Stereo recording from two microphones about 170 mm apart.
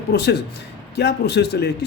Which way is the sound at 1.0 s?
80° left.